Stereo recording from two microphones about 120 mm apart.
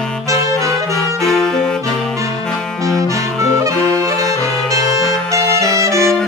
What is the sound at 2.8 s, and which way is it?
Saxophone, 25° right (ahead or behind).